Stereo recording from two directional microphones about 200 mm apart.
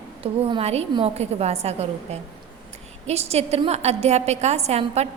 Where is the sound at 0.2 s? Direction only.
30° right (ahead or behind).